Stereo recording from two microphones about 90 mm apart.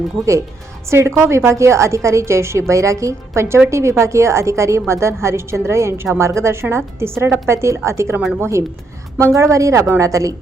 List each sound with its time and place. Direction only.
0.2 s a woman's voice: 30° right (ahead or behind)